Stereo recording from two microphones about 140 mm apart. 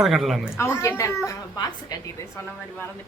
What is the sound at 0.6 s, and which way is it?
A woman's voice, 20° left (ahead or behind).